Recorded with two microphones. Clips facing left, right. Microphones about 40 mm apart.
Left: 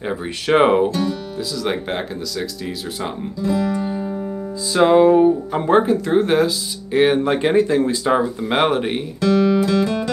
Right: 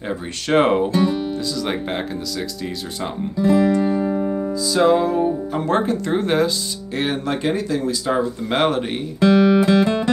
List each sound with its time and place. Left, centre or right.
0.5 s speech: centre
3.3 s music: right
4.7 s speech: left
5.8 s speech: centre
6.9 s speech: centre
8.2 s speech: centre
9.2 s music: right